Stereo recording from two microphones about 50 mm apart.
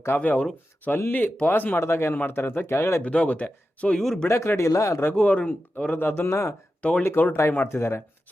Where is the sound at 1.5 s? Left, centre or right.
Left.